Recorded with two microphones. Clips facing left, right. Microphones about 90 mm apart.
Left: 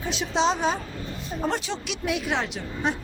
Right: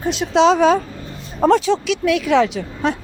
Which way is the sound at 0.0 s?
65° right (ahead or behind).